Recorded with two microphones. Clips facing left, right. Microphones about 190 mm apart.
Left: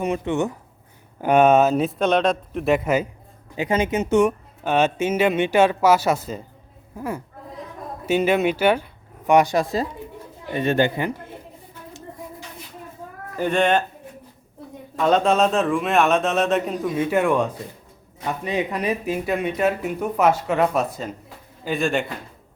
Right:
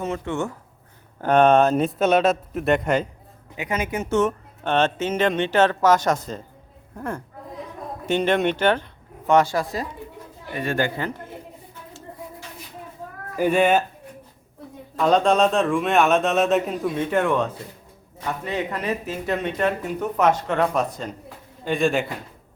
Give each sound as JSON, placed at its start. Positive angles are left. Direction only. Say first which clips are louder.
{"t": 0.0, "sound": "speech", "louder": "left 4 dB", "side_deg": 15}
{"t": 3.6, "sound": "speech", "louder": "left 5 dB", "side_deg": 30}
{"t": 13.3, "sound": "speech", "louder": "right 1 dB", "side_deg": -10}
{"t": 14.9, "sound": "speech", "louder": "even", "side_deg": 0}